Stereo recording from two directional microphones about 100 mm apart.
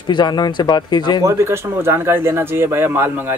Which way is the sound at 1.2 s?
30° right (ahead or behind).